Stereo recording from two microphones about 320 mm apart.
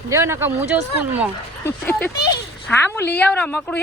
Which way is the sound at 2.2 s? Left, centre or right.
Centre.